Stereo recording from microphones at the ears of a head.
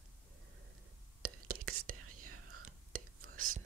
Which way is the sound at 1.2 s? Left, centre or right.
Right.